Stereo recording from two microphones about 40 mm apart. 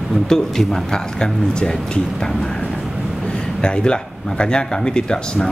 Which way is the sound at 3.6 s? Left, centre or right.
Left.